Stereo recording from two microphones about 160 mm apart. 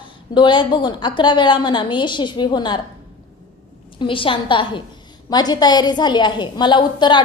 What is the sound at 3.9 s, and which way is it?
A woman's voice, 35° left (ahead or behind).